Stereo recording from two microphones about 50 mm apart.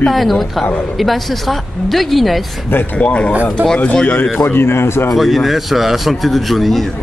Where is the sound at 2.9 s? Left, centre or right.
Left.